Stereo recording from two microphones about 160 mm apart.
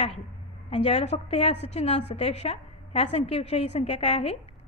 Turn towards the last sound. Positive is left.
turn(degrees=40)  # may be behind; listen again after turning